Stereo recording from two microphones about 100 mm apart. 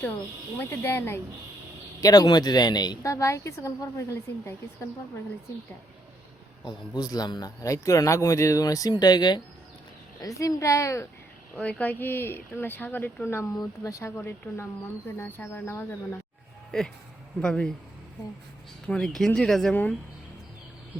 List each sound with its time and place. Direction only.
0.6 s speech: 20° left (ahead or behind)
2.0 s speech: 40° left (ahead or behind)
6.7 s speech: 45° left (ahead or behind)
10.2 s speech: 35° left (ahead or behind)
11.5 s speech: 15° left (ahead or behind); by 14.1 s 35° left (ahead or behind)
14.2 s speech: 20° left (ahead or behind)
17.4 s speech: 10° left (ahead or behind)
18.9 s speech: 5° left (ahead or behind)